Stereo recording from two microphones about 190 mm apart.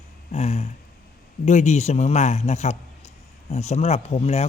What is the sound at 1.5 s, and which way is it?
A man's voice, 40° left (ahead or behind).